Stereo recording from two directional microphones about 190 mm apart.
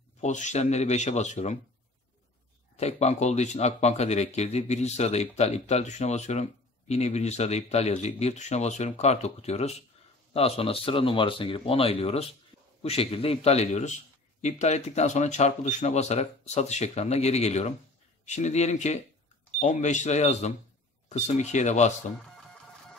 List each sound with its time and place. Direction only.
0.2 s speech: 40° left (ahead or behind)
2.8 s speech: 35° left (ahead or behind)